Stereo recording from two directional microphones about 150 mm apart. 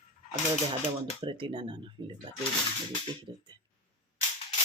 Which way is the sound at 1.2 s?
35° right (ahead or behind).